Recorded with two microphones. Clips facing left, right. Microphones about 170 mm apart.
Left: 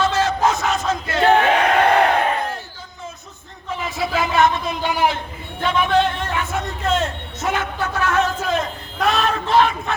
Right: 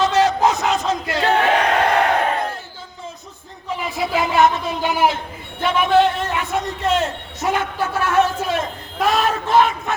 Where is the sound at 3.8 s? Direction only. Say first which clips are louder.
Right 1 dB; 15° right (ahead or behind).